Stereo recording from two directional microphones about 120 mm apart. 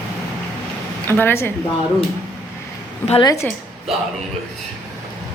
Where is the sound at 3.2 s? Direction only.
30° left (ahead or behind).